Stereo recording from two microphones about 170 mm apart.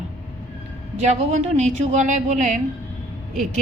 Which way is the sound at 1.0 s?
40° right (ahead or behind).